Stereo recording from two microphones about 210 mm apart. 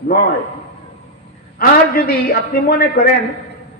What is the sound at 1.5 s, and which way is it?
A man's voice, 45° left (ahead or behind).